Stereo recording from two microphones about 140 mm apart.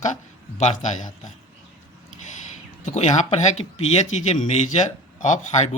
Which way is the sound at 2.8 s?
55° left (ahead or behind).